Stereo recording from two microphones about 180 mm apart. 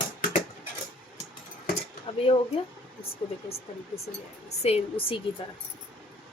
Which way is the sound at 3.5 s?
35° left (ahead or behind).